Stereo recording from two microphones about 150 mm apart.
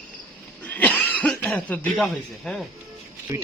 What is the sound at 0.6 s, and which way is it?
Cough, 10° left (ahead or behind).